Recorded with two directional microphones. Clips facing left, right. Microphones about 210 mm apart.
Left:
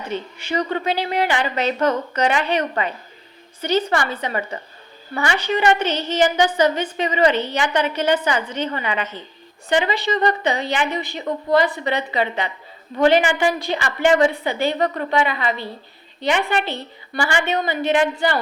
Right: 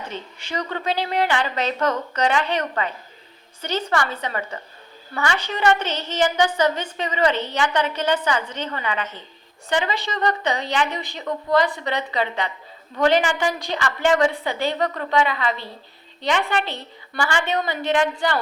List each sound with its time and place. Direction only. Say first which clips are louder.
0.1 s a woman's voice: left 10 dB; 10° left (ahead or behind)
14.3 s a woman's voice: left 2 dB; centre (ahead or behind)